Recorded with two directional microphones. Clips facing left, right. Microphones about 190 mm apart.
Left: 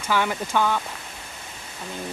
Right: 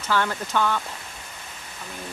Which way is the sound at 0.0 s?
10° left (ahead or behind).